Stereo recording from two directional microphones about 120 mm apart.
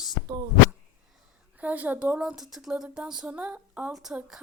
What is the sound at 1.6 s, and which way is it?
A woman's voice, 15° right (ahead or behind).